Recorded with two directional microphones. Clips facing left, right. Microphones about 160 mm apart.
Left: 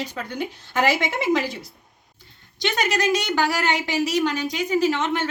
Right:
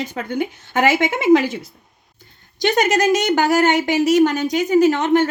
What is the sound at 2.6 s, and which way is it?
Speech, 45° right (ahead or behind).